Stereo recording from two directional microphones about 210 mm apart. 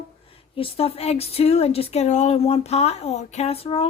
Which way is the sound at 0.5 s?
25° left (ahead or behind).